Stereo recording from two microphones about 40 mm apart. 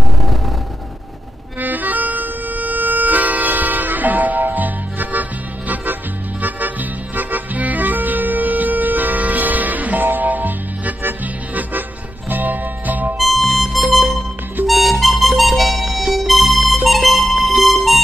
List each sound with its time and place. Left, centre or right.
1.6 s music: right
6.4 s music: right
13.2 s harmonica: centre
17.6 s music: centre